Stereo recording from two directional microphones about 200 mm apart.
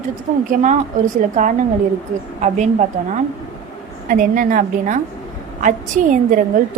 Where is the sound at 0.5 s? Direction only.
40° right (ahead or behind).